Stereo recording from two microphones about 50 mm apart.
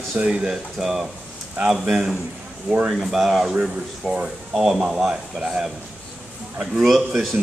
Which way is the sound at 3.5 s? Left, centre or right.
Centre.